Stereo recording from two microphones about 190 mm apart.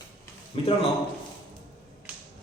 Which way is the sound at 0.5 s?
30° left (ahead or behind).